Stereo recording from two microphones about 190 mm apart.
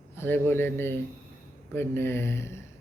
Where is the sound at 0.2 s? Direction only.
10° left (ahead or behind).